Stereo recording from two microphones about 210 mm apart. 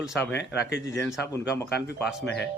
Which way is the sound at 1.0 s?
10° left (ahead or behind).